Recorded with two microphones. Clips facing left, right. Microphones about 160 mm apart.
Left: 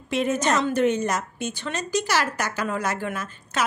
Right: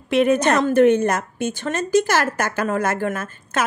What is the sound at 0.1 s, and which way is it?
A woman's voice, 60° right (ahead or behind).